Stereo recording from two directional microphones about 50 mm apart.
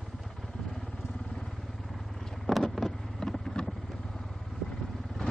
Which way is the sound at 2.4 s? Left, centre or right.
Centre.